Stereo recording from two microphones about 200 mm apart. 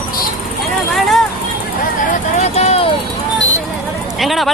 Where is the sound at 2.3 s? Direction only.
35° left (ahead or behind).